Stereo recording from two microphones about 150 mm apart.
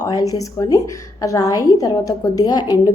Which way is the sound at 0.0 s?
25° left (ahead or behind).